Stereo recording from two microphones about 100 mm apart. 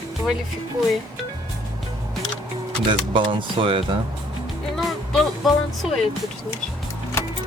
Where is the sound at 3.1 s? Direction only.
60° right (ahead or behind).